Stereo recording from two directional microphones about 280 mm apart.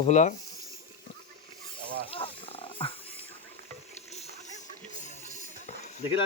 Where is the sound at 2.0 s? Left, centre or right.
Centre.